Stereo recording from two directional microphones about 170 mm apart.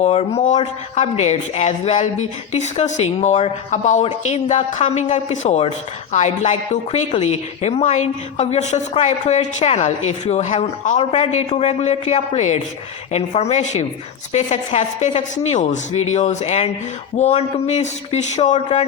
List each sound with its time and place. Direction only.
0.0 s a woman's voice: 40° left (ahead or behind)